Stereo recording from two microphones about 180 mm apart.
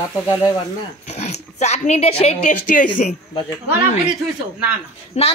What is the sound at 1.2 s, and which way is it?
Speech, 40° left (ahead or behind).